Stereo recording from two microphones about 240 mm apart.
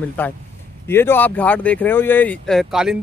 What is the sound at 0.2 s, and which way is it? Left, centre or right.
Speech, centre.